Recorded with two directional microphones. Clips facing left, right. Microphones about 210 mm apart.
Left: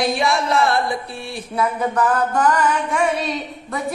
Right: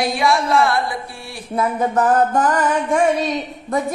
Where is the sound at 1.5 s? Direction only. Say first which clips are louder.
Right 2 dB; 45° right (ahead or behind).